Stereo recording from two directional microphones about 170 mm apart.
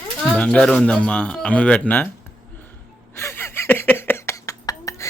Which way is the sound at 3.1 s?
15° left (ahead or behind).